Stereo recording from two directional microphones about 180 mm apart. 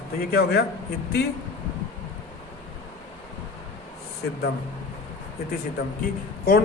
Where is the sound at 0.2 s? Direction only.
60° left (ahead or behind).